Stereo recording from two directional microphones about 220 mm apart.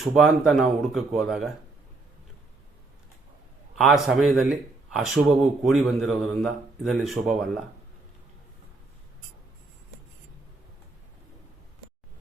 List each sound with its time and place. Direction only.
0.0 s speech: centre (ahead or behind)
3.8 s speech: centre (ahead or behind)